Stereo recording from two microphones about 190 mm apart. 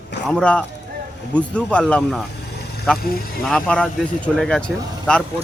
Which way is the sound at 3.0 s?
50° left (ahead or behind).